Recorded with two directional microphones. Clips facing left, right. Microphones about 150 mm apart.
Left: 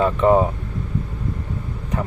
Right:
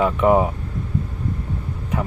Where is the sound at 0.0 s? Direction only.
10° right (ahead or behind).